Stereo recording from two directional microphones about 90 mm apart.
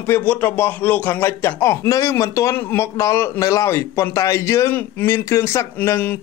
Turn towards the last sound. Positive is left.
turn(degrees=30)  # may be behind; listen again after turning